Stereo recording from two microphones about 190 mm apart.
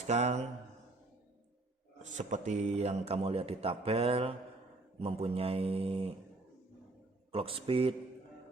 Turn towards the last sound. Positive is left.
turn(degrees=-30)  # may be behind; listen again after turning